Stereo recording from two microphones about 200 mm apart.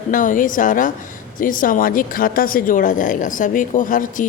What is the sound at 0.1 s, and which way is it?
A woman's voice, 40° left (ahead or behind).